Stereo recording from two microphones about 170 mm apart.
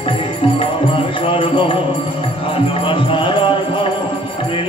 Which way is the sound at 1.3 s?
30° left (ahead or behind).